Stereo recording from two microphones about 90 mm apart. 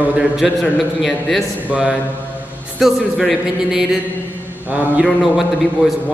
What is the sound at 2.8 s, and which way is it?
A man's voice, 5° right (ahead or behind).